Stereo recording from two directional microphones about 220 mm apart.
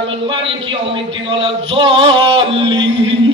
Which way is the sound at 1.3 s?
25° right (ahead or behind).